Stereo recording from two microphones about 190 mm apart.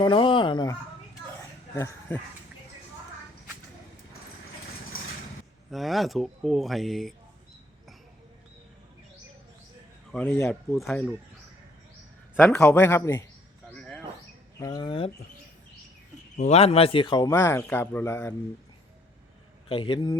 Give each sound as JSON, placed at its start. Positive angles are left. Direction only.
{"t": 0.0, "sound": "speech", "side_deg": 25}
{"t": 5.7, "sound": "speech", "side_deg": 0}
{"t": 10.1, "sound": "speech", "side_deg": 10}
{"t": 10.5, "sound": "speech", "side_deg": 0}
{"t": 12.5, "sound": "a man's voice", "side_deg": 10}
{"t": 13.7, "sound": "bird", "side_deg": 5}
{"t": 14.6, "sound": "speech", "side_deg": 20}
{"t": 16.4, "sound": "a man's voice", "side_deg": 35}
{"t": 19.6, "sound": "speech", "side_deg": 30}